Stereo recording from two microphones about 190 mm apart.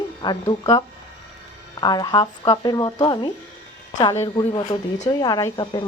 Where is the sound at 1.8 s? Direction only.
20° left (ahead or behind).